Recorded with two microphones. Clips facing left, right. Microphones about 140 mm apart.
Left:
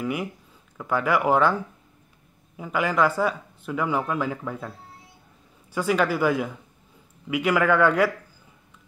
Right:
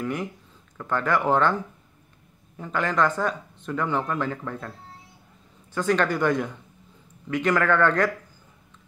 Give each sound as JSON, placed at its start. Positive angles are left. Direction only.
{"t": 0.0, "sound": "speech", "side_deg": 10}
{"t": 5.8, "sound": "speech", "side_deg": 10}